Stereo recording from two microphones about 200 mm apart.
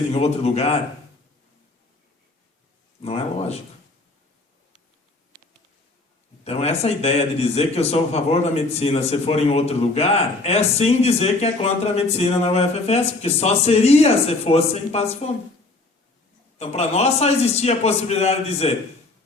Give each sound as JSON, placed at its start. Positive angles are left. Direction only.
{"t": 0.1, "sound": "a man's voice", "side_deg": 30}
{"t": 3.0, "sound": "a man's voice", "side_deg": 30}
{"t": 6.4, "sound": "a man's voice", "side_deg": 30}
{"t": 16.6, "sound": "a man's voice", "side_deg": 30}